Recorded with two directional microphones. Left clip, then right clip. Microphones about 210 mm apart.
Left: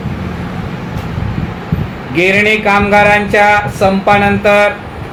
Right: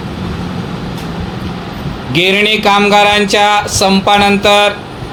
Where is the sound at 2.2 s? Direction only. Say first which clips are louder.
Even; 35° right (ahead or behind).